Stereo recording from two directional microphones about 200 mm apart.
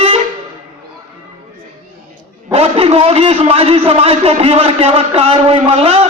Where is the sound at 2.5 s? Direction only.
30° right (ahead or behind).